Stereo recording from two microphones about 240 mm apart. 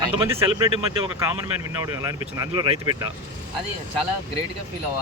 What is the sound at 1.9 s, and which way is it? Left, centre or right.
Speech, centre.